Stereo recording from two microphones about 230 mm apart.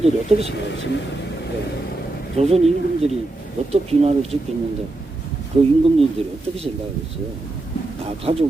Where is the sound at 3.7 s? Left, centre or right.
Right.